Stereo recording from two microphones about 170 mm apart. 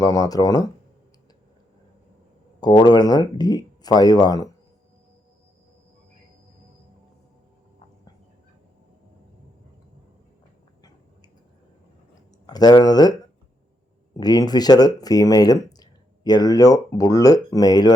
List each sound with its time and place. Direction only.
0.0 s speech: 20° left (ahead or behind)
2.6 s speech: 25° left (ahead or behind)
12.5 s speech: 25° left (ahead or behind)
14.2 s speech: 25° left (ahead or behind)